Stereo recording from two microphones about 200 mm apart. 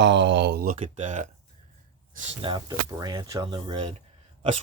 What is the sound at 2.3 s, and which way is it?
Speech, 25° right (ahead or behind).